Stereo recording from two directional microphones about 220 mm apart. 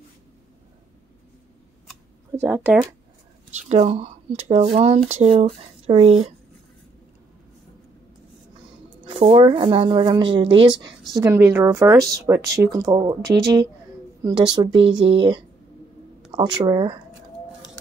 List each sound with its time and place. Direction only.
2.3 s speech: 10° right (ahead or behind)
3.5 s speech: 30° right (ahead or behind)
9.0 s speech: 25° right (ahead or behind)
14.7 s speech: 55° right (ahead or behind)
15.0 s speech: 25° right (ahead or behind)